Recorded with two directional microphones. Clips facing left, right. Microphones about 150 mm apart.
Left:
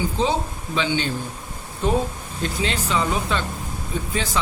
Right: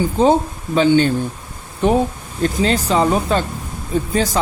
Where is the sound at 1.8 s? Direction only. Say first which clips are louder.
Right 6 dB; 70° right (ahead or behind).